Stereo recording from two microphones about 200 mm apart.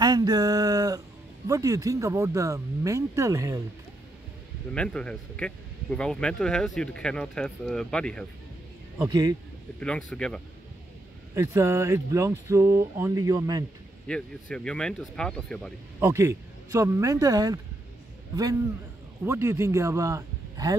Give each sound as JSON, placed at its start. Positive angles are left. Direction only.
{"t": 0.0, "sound": "a sound", "side_deg": -20}
{"t": 1.5, "sound": "speech", "side_deg": -15}
{"t": 4.7, "sound": "speech", "side_deg": 5}
{"t": 9.0, "sound": "speech", "side_deg": -20}
{"t": 9.8, "sound": "speech", "side_deg": 5}
{"t": 11.3, "sound": "speech", "side_deg": -15}
{"t": 14.0, "sound": "speech", "side_deg": 5}
{"t": 16.0, "sound": "a man's voice", "side_deg": -15}